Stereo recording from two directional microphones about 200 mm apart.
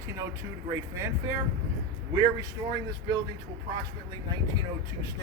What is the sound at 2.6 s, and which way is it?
Speech, 20° right (ahead or behind).